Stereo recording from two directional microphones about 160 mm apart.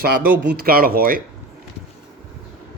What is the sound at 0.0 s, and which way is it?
Speech, 70° right (ahead or behind).